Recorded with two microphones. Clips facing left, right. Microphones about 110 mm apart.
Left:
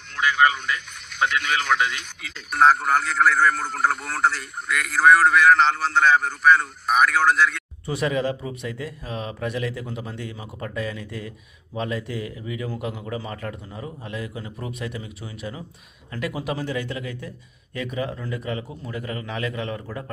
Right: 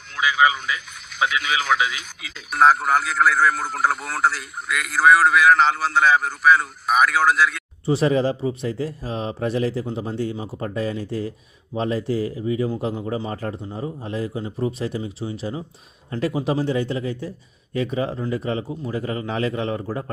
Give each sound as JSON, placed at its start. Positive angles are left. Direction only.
{"t": 0.1, "sound": "a man's voice", "side_deg": -5}
{"t": 7.9, "sound": "a man's voice", "side_deg": -30}